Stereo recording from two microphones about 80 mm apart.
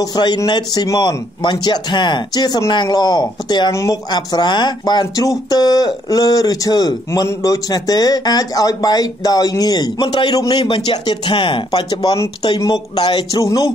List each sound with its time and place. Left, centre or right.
0.0 s speech: left
7.4 s speech: left
13.4 s speech: left